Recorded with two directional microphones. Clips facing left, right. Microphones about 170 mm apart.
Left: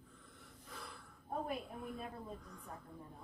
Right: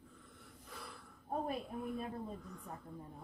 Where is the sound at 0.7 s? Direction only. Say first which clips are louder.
Even; centre (ahead or behind).